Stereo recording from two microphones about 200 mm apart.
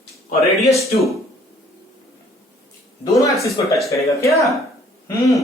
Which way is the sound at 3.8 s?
15° left (ahead or behind).